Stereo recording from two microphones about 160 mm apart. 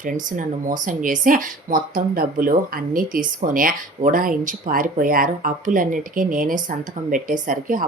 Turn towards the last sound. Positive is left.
turn(degrees=-55)  # may be behind; listen again after turning